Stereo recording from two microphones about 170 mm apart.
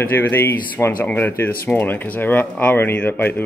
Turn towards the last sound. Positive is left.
turn(degrees=10)  # may be behind; listen again after turning